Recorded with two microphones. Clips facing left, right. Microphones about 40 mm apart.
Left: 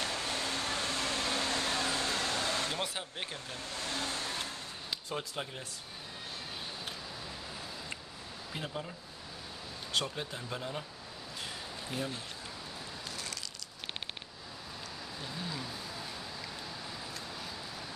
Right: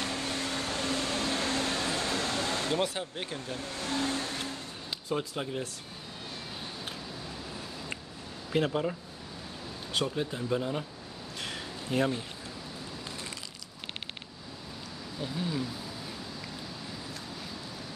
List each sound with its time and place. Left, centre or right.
0.0 s a sound: centre
3.9 s vehicle: centre
5.1 s speech: centre
8.5 s speech: right
10.0 s speech: centre
11.4 s a sound: right
15.2 s speech: centre